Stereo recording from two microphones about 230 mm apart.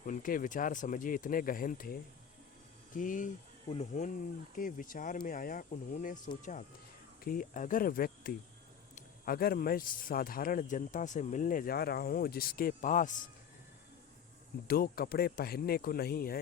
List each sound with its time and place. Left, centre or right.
0.0 s a man's voice: left
14.7 s a man's voice: left